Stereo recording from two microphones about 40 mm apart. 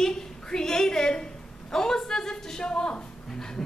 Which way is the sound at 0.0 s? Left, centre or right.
Centre.